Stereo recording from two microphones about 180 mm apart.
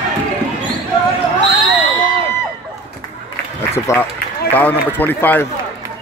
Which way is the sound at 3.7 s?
15° left (ahead or behind).